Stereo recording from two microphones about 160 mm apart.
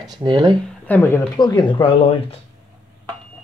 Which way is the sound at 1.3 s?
30° left (ahead or behind).